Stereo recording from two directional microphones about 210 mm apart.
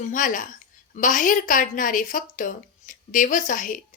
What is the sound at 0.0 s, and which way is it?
A woman's voice, 40° left (ahead or behind).